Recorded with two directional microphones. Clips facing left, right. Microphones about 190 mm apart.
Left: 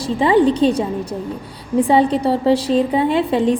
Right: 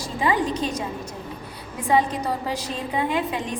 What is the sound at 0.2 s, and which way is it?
A woman's voice, 30° left (ahead or behind).